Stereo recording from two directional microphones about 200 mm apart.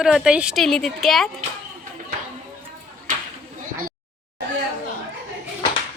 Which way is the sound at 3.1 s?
45° right (ahead or behind).